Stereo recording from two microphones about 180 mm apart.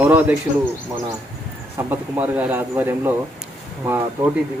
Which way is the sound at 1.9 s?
10° right (ahead or behind).